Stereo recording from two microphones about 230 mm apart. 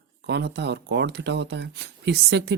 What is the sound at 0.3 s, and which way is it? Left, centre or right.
Speech, right.